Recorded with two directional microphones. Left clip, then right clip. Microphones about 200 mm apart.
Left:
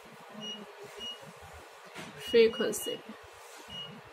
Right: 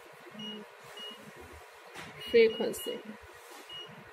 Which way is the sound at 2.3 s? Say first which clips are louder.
Even; 15° left (ahead or behind).